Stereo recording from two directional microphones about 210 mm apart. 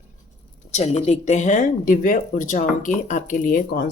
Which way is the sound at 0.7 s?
30° left (ahead or behind).